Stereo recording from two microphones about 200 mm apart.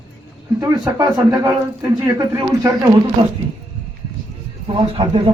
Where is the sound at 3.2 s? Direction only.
30° right (ahead or behind).